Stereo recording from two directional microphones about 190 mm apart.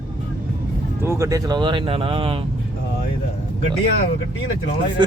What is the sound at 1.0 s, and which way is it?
Speech, 15° right (ahead or behind).